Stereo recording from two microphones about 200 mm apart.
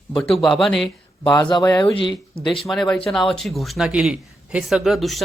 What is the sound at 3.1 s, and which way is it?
Speech, centre (ahead or behind).